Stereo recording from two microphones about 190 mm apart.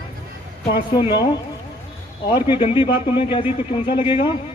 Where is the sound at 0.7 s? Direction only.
25° left (ahead or behind).